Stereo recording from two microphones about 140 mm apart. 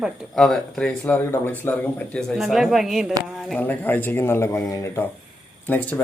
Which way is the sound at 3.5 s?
10° left (ahead or behind).